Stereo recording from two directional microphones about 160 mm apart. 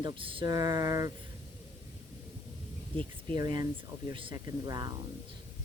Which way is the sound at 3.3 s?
25° right (ahead or behind).